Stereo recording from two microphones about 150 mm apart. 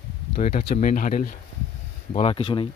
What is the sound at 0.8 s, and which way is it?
Speech, 65° left (ahead or behind).